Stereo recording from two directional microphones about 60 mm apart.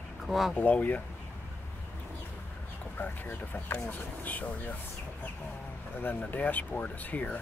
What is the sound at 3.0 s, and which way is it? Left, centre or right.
Speech, left.